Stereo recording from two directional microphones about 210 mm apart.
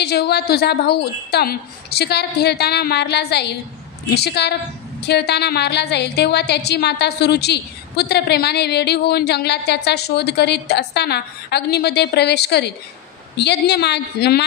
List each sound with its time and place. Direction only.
0.0 s a woman's voice: 50° left (ahead or behind)